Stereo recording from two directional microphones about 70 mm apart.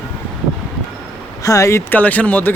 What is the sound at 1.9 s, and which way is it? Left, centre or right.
Speech, left.